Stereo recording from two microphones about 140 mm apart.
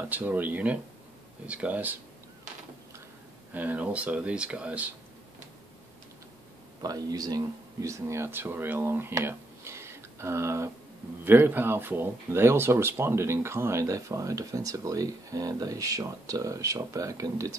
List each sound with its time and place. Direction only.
0.1 s speech: 10° right (ahead or behind)
3.5 s speech: 10° right (ahead or behind)
6.8 s speech: 25° right (ahead or behind)